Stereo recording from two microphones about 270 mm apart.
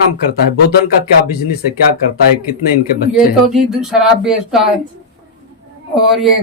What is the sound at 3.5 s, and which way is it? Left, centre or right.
Speech, centre.